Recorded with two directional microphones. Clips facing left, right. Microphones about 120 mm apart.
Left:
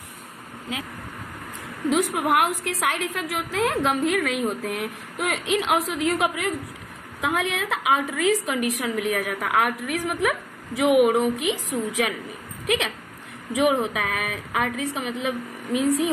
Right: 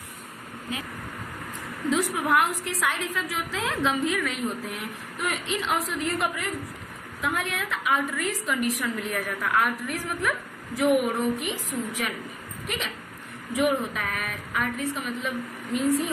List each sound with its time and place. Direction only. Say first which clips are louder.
1.9 s a woman's voice: left 3 dB; 60° left (ahead or behind)
13.5 s a woman's voice: left 3 dB; 90° left